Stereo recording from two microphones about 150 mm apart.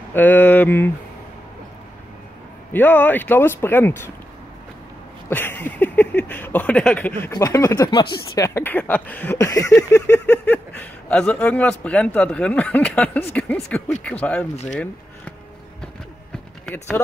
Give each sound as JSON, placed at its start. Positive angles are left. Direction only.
{"t": 0.1, "sound": "speech", "side_deg": 10}
{"t": 2.7, "sound": "speech", "side_deg": 10}
{"t": 5.3, "sound": "a sound", "side_deg": 15}
{"t": 7.2, "sound": "speech", "side_deg": 20}
{"t": 7.9, "sound": "speech", "side_deg": 30}
{"t": 8.5, "sound": "speech", "side_deg": 15}
{"t": 16.6, "sound": "speech", "side_deg": 10}